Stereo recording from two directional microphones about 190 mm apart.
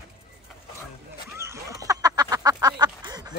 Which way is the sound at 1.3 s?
15° right (ahead or behind).